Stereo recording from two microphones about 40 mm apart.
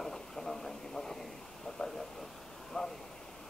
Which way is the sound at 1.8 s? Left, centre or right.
Left.